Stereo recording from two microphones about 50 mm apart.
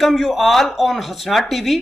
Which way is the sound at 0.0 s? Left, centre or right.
Centre.